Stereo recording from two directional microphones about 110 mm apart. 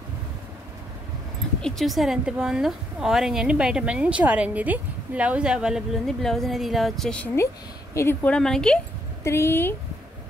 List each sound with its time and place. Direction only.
1.6 s a woman's voice: centre (ahead or behind)
7.9 s a woman's voice: 25° left (ahead or behind)
8.3 s a woman's voice: 5° left (ahead or behind)
9.2 s a woman's voice: 25° left (ahead or behind)